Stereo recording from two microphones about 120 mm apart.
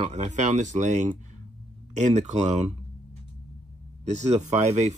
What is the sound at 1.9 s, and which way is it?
Speech, 70° right (ahead or behind).